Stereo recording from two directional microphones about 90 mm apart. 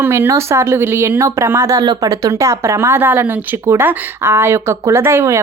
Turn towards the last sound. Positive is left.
turn(degrees=-30)  # may be behind; listen again after turning